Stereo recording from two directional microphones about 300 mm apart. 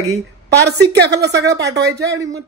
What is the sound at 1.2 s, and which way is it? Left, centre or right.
Speech, right.